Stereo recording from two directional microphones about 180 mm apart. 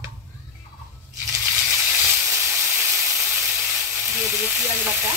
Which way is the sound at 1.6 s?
5° right (ahead or behind).